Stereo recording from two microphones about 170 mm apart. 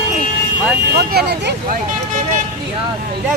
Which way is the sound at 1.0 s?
65° right (ahead or behind).